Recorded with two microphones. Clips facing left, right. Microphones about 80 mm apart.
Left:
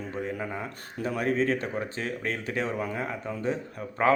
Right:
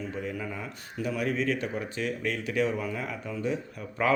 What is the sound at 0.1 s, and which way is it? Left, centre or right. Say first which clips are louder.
Speech: left 2 dB; left.